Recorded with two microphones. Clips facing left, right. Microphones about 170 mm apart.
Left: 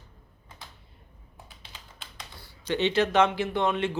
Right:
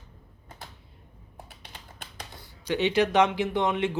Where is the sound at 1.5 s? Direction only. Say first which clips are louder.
Right 3 dB; 60° right (ahead or behind).